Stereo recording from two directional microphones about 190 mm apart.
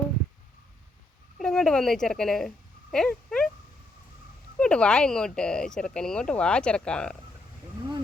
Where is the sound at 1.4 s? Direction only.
5° left (ahead or behind).